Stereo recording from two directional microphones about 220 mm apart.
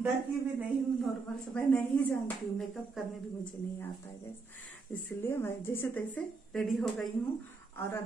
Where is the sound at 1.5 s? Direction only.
5° left (ahead or behind).